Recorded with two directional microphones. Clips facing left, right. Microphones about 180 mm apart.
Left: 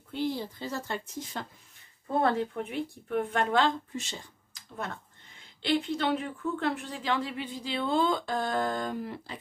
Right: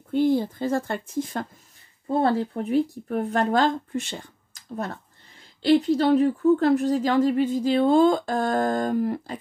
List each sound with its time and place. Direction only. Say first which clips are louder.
0.1 s a woman's voice: right 11 dB; 50° right (ahead or behind)
2.0 s speech: right 5 dB; 30° right (ahead or behind); by 4.3 s 60° right (ahead or behind)
5.6 s a woman's voice: right 9 dB; 40° right (ahead or behind)